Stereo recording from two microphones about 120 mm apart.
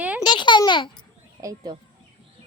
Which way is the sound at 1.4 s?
35° right (ahead or behind).